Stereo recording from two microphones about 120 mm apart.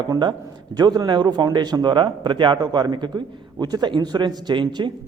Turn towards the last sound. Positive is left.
turn(degrees=-40)  # may be behind; listen again after turning